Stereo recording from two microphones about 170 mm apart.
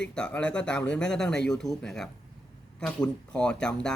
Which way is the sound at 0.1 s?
5° left (ahead or behind).